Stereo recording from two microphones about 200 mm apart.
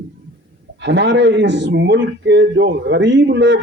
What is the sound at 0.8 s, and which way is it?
A man's voice, 60° right (ahead or behind).